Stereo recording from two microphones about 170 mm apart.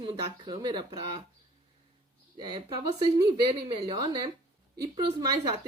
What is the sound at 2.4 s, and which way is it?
Speech, 25° right (ahead or behind).